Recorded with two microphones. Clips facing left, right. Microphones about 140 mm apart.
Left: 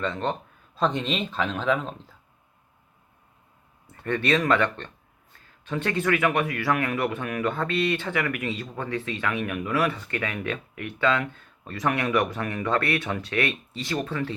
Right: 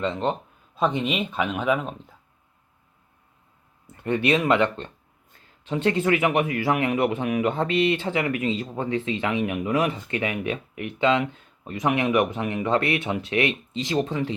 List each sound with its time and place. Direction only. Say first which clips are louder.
0.0 s speech: right 3 dB; 15° right (ahead or behind)
4.0 s speech: right 2 dB; 15° right (ahead or behind)